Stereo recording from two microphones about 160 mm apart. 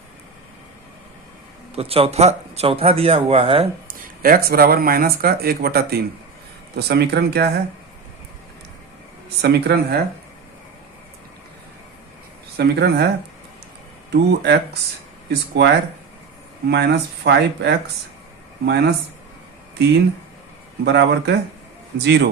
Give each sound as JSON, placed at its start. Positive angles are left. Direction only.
{"t": 1.7, "sound": "speech", "side_deg": -35}
{"t": 3.8, "sound": "speech", "side_deg": -65}
{"t": 6.7, "sound": "speech", "side_deg": -90}
{"t": 9.4, "sound": "speech", "side_deg": -90}
{"t": 12.5, "sound": "speech", "side_deg": -90}
{"t": 14.1, "sound": "speech", "side_deg": -90}
{"t": 20.8, "sound": "speech", "side_deg": -90}